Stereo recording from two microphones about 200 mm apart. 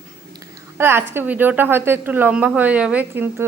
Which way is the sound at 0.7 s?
10° right (ahead or behind).